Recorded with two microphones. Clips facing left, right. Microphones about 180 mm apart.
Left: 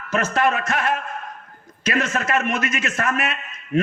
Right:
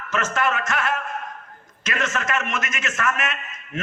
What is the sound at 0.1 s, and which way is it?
A man's voice, 35° left (ahead or behind).